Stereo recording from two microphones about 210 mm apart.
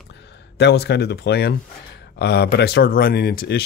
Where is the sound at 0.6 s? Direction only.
55° left (ahead or behind).